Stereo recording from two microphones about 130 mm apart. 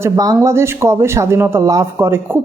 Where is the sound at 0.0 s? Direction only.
25° right (ahead or behind).